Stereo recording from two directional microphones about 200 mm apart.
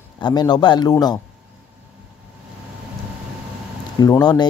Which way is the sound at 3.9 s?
20° left (ahead or behind).